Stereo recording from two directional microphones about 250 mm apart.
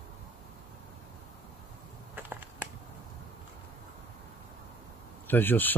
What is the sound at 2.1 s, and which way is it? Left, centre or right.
Finger snapping, centre.